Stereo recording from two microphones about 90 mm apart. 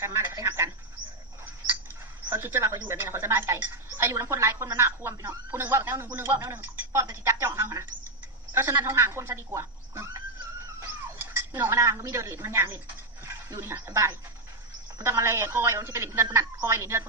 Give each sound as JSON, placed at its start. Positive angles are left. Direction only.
{"t": 0.4, "sound": "frog", "side_deg": -30}
{"t": 2.4, "sound": "a woman's voice", "side_deg": -30}
{"t": 11.5, "sound": "a woman's voice", "side_deg": -25}
{"t": 14.9, "sound": "speech", "side_deg": -40}
{"t": 15.2, "sound": "a woman's voice", "side_deg": -25}